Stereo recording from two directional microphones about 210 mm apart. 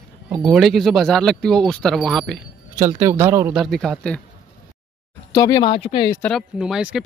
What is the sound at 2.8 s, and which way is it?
Speech, 15° right (ahead or behind).